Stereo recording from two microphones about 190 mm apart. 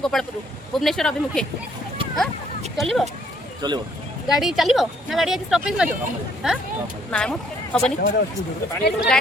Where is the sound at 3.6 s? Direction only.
20° right (ahead or behind).